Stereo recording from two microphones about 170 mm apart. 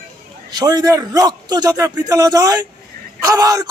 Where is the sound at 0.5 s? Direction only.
20° right (ahead or behind).